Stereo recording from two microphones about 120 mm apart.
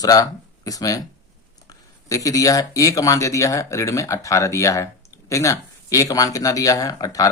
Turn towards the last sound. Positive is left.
turn(degrees=30)  # may be behind; listen again after turning